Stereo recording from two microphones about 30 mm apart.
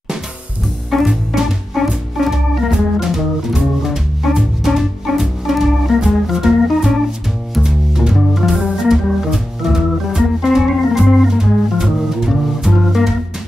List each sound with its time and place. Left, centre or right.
0.8 s music: centre
1.8 s organ: centre
4.2 s music: centre
4.6 s organ: centre
7.6 s music: centre
8.1 s organ: centre
11.3 s music: centre